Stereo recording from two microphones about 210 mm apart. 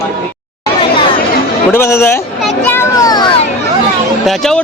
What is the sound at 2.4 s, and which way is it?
Children playing, 10° left (ahead or behind).